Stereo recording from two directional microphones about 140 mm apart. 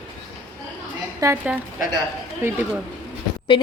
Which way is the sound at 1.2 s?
25° right (ahead or behind).